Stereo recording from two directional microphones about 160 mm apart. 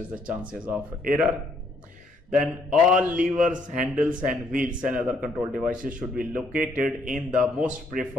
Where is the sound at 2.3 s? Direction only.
5° right (ahead or behind).